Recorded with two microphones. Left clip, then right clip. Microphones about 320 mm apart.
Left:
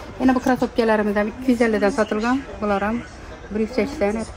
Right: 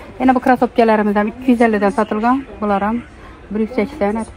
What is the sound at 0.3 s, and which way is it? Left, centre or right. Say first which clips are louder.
Speech: right 7 dB; right.